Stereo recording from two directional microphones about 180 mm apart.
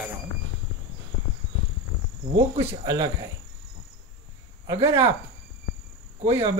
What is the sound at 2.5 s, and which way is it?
Speech, 35° right (ahead or behind).